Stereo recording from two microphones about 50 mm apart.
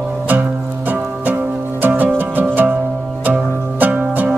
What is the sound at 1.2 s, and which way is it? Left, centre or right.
Music, right.